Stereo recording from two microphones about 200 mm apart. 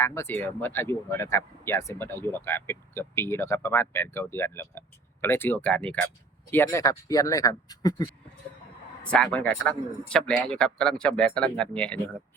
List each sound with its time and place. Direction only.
0.0 s speech: 10° left (ahead or behind)
9.0 s a man's voice: 5° left (ahead or behind)